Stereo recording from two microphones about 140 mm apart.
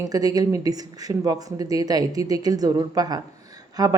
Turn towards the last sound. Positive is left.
turn(degrees=-30)  # may be behind; listen again after turning